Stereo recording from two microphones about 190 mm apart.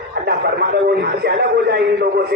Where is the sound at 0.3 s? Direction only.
55° right (ahead or behind).